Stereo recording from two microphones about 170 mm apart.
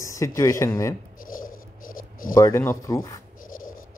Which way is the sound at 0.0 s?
20° left (ahead or behind).